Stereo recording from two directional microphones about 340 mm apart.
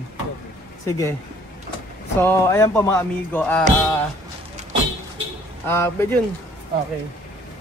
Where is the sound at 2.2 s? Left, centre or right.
Centre.